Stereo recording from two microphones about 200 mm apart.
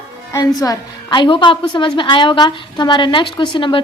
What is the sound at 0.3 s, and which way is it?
A woman's voice, 20° left (ahead or behind).